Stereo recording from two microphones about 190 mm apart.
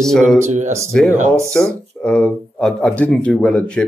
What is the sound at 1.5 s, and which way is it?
A man's voice, 5° left (ahead or behind).